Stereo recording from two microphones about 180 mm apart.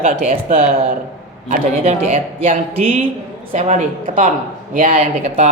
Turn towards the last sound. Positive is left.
turn(degrees=-35)  # may be behind; listen again after turning